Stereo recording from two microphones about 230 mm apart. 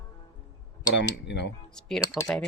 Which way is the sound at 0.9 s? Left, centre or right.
Left.